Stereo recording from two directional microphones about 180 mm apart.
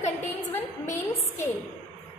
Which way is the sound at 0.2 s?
10° left (ahead or behind).